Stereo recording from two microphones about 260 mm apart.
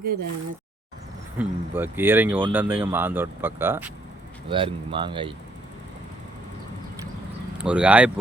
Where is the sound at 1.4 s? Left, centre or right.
Centre.